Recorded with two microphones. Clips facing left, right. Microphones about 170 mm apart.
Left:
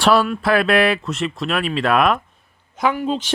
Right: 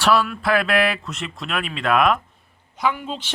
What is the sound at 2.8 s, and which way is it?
Speech, 45° left (ahead or behind).